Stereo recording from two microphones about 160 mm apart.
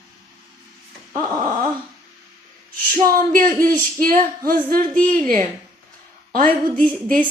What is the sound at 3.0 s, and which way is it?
A woman's voice, 60° right (ahead or behind).